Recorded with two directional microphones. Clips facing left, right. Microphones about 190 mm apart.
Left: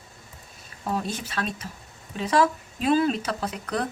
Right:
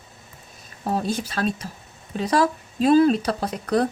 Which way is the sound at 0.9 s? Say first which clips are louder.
Right 4 dB; 35° right (ahead or behind).